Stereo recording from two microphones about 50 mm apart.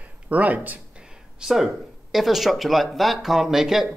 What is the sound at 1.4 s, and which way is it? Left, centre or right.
Speech, centre.